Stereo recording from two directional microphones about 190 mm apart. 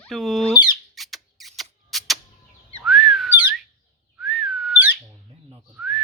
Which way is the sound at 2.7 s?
Centre (ahead or behind).